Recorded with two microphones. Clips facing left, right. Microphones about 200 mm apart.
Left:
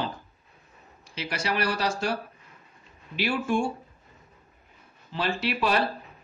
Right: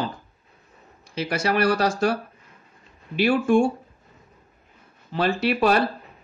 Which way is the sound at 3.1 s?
50° right (ahead or behind).